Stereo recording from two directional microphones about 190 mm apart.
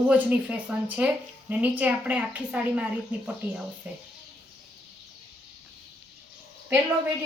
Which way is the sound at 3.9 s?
10° right (ahead or behind).